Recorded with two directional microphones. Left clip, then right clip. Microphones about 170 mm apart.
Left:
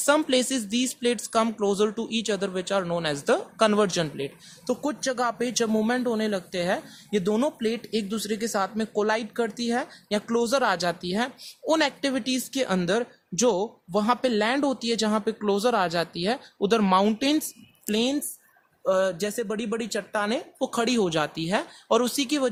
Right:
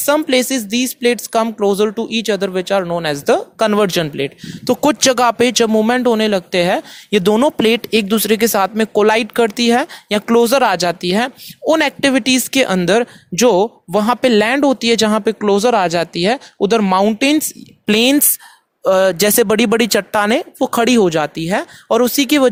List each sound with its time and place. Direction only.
0.3 s speech: 35° right (ahead or behind)
17.8 s speech: 50° right (ahead or behind)